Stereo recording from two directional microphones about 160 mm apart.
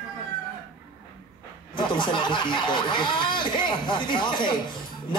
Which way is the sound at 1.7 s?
30° left (ahead or behind).